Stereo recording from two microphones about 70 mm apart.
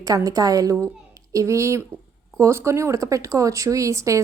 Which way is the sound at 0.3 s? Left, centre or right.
Right.